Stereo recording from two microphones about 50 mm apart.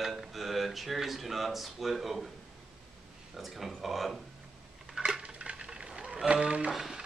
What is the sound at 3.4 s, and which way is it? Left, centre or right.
Speech, centre.